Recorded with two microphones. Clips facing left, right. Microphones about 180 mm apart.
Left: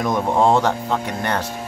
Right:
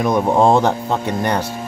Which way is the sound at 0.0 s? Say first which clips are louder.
Right 3 dB; 15° right (ahead or behind).